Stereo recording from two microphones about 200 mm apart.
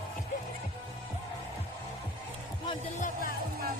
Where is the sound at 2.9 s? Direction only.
40° left (ahead or behind).